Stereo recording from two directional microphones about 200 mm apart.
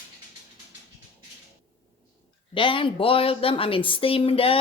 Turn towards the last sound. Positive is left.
turn(degrees=30)  # may be behind; listen again after turning